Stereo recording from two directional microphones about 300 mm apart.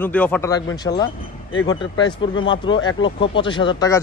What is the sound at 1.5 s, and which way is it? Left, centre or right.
Speech, left.